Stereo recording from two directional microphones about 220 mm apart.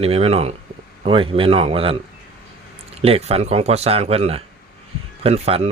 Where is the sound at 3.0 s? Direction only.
25° right (ahead or behind).